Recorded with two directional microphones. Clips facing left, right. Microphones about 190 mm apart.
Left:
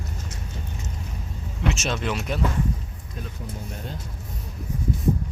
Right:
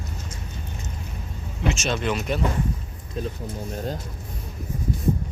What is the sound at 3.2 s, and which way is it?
Speech, 30° right (ahead or behind).